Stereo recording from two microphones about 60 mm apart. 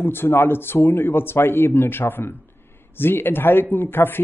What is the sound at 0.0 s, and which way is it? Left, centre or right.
Speech, left.